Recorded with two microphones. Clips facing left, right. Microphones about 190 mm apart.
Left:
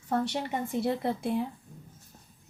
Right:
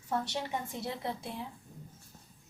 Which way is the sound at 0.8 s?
60° left (ahead or behind).